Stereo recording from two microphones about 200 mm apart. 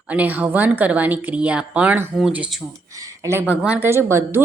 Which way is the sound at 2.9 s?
15° right (ahead or behind).